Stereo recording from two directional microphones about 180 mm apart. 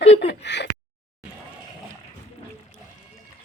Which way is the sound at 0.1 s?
70° left (ahead or behind).